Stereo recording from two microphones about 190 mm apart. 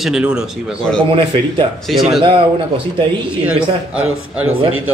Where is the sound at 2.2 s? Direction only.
25° right (ahead or behind).